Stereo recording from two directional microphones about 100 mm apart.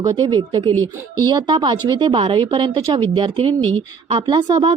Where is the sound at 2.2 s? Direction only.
65° right (ahead or behind).